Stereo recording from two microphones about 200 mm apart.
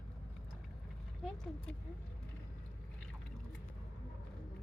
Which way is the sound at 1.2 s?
5° left (ahead or behind).